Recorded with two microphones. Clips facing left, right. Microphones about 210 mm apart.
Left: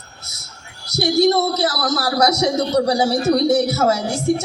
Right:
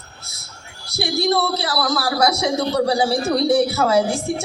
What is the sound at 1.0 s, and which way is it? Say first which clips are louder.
A man's voice: left 4 dB; 45° left (ahead or behind).